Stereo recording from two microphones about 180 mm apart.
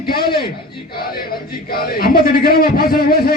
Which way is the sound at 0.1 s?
60° left (ahead or behind).